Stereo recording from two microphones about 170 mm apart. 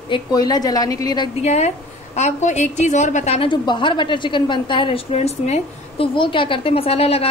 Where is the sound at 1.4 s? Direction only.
40° left (ahead or behind).